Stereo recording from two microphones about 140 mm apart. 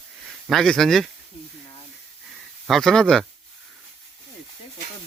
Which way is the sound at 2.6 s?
5° left (ahead or behind).